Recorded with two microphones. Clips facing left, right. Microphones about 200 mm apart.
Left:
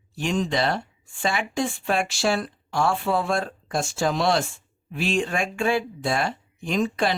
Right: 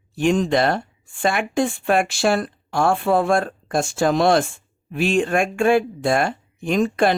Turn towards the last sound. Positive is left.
turn(degrees=-50)  # may be behind; listen again after turning